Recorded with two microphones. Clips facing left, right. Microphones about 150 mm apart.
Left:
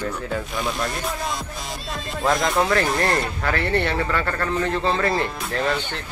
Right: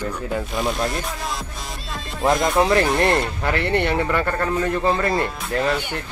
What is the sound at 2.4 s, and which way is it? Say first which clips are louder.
Speech: right 3 dB; 20° right (ahead or behind).